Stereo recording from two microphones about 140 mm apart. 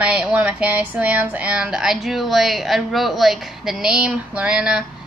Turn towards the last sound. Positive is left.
turn(degrees=-5)  # may be behind; listen again after turning